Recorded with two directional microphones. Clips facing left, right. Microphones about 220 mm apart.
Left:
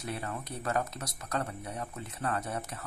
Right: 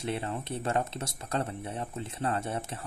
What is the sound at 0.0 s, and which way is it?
Speech, 25° right (ahead or behind).